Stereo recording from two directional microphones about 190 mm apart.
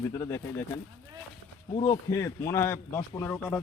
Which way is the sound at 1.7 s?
30° left (ahead or behind).